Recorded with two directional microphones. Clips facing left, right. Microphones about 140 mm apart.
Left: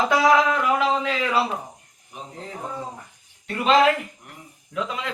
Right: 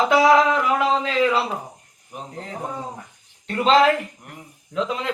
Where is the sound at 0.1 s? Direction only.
20° right (ahead or behind).